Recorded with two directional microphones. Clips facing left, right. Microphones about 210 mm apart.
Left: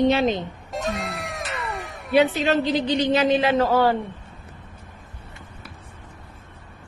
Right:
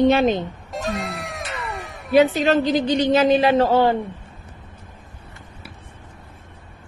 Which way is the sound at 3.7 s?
25° right (ahead or behind).